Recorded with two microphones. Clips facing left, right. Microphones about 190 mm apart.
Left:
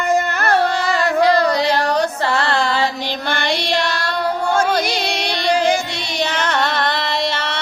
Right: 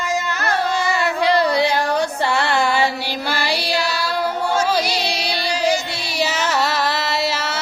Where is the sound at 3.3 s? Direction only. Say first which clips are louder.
Left 2 dB; 5° right (ahead or behind).